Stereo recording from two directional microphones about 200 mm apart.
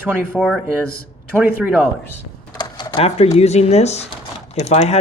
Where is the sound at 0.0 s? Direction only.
10° right (ahead or behind).